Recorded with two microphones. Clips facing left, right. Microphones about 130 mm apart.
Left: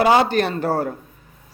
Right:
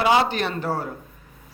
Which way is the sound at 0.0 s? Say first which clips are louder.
Left 4 dB; 45° left (ahead or behind).